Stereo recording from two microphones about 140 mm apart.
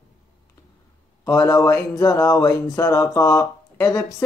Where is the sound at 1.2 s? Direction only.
25° left (ahead or behind).